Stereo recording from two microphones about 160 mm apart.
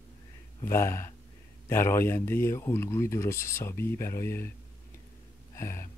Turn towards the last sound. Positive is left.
turn(degrees=20)  # may be behind; listen again after turning